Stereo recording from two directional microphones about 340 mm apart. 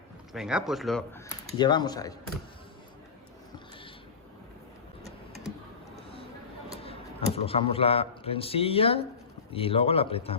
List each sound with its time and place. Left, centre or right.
0.3 s speech: centre
1.5 s speech: centre
6.8 s a sound: centre
7.3 s speech: centre